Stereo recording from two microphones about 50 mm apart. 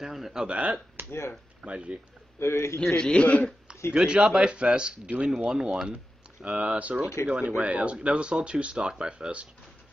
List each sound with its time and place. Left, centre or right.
0.0 s speech: centre
0.5 s speech: right
1.0 s a sound: right
1.6 s speech: right
2.4 s a man's voice: left
3.0 s a man's voice: left
3.9 s speech: centre
6.4 s speech: right